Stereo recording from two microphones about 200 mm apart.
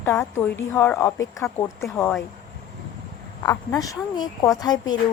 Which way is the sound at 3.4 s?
15° left (ahead or behind).